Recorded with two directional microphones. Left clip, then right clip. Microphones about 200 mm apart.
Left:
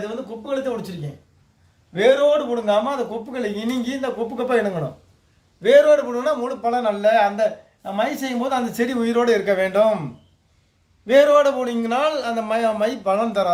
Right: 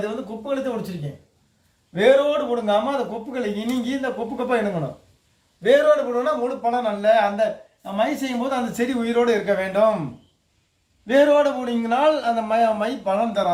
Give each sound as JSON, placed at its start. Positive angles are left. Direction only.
{"t": 0.4, "sound": "speech", "side_deg": 30}
{"t": 5.6, "sound": "speech", "side_deg": 40}
{"t": 11.0, "sound": "a man's voice", "side_deg": 55}